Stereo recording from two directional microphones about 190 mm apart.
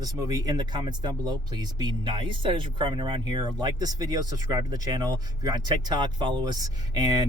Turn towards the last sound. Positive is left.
turn(degrees=-20)  # may be behind; listen again after turning